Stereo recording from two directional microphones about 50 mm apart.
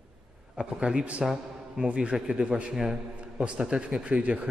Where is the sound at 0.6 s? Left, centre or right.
Centre.